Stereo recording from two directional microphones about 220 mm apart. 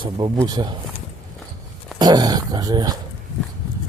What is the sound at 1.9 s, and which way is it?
Speech, 20° right (ahead or behind).